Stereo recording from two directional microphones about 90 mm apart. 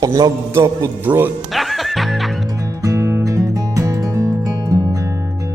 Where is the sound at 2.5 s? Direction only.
40° right (ahead or behind).